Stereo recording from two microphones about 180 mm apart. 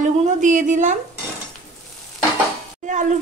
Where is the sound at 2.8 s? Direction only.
45° right (ahead or behind).